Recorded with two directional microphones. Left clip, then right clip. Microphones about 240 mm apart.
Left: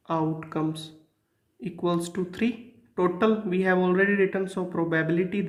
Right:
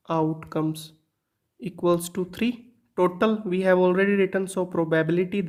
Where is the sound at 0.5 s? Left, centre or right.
Right.